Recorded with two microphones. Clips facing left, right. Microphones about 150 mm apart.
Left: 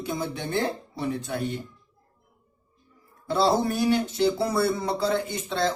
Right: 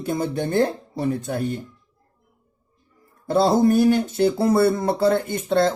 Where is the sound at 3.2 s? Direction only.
50° right (ahead or behind).